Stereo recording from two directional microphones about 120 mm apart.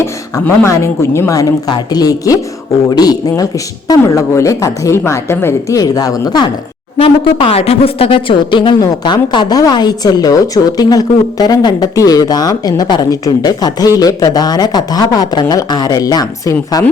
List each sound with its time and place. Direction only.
0.4 s speech: 20° left (ahead or behind)
7.0 s speech: 55° left (ahead or behind); by 16.8 s 30° left (ahead or behind)